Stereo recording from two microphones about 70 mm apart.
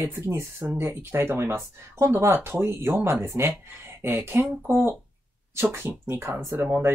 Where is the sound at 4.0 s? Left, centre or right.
Right.